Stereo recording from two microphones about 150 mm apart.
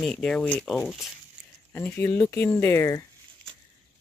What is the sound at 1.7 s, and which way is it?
Speech, 15° left (ahead or behind).